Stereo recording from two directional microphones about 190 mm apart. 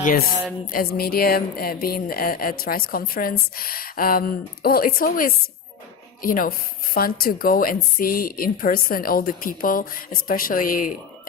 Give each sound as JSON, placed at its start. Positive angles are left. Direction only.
{"t": 0.0, "sound": "speech", "side_deg": 50}